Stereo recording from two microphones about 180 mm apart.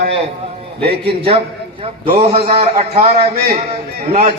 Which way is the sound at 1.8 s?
35° right (ahead or behind).